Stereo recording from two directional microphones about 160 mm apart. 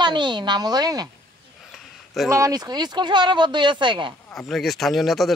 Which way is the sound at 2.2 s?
20° right (ahead or behind).